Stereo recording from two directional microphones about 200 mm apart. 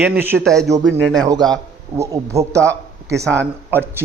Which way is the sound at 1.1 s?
20° right (ahead or behind).